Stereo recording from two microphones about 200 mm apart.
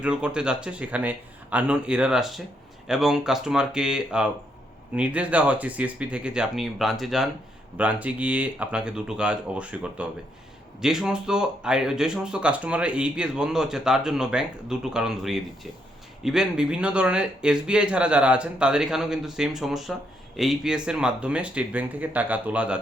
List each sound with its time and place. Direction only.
0.0 s speech: 5° right (ahead or behind)